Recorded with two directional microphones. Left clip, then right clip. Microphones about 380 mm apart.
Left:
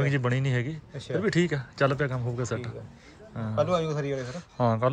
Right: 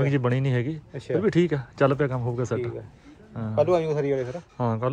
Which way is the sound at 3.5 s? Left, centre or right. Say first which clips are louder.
Right 4 dB; centre.